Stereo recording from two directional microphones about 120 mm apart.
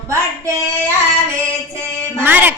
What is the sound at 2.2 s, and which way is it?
Speech, 15° right (ahead or behind).